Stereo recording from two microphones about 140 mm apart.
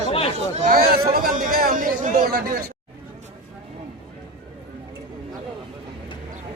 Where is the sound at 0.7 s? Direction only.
90° right.